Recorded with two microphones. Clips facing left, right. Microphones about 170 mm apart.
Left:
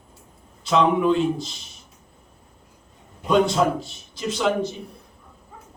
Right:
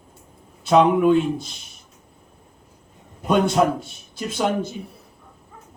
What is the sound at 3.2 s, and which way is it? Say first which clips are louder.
A man's voice: right 1 dB; 55° right (ahead or behind).